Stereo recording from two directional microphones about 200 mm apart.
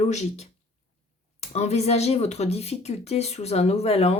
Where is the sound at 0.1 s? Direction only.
35° left (ahead or behind).